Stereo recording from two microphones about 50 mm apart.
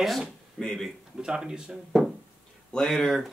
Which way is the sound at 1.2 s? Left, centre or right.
Centre.